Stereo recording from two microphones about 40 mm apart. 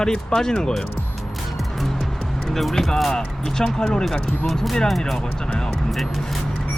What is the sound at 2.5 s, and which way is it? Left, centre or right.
Speech, centre.